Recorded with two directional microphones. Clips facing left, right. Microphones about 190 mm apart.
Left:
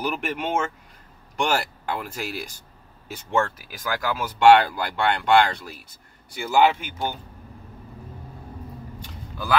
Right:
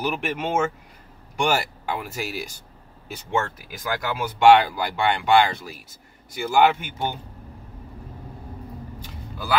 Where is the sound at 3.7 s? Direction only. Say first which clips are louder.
Even; 25° right (ahead or behind).